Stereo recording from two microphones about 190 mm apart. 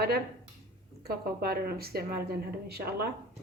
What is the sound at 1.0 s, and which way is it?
A woman's voice, 55° right (ahead or behind).